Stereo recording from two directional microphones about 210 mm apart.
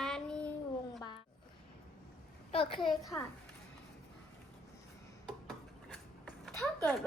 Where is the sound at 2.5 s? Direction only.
25° left (ahead or behind).